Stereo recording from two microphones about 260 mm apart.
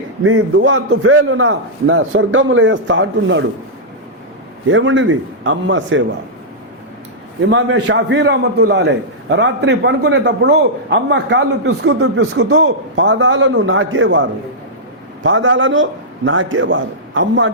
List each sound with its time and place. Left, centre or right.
0.3 s a man's voice: right
4.7 s a man's voice: right
7.5 s a man's voice: right